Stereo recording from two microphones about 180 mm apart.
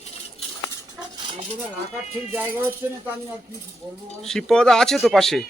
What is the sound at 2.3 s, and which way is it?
Speech, 10° right (ahead or behind).